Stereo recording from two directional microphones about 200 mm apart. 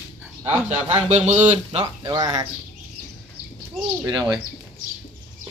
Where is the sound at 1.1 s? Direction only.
35° right (ahead or behind).